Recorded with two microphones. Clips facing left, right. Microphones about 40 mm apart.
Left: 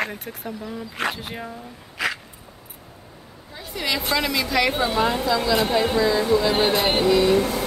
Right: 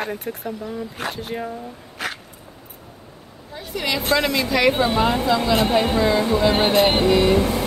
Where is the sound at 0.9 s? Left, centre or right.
Left.